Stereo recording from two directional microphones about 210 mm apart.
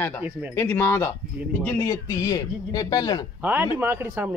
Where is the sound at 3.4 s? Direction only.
10° right (ahead or behind).